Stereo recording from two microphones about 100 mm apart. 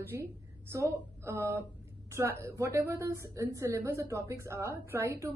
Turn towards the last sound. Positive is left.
turn(degrees=-30)  # may be behind; listen again after turning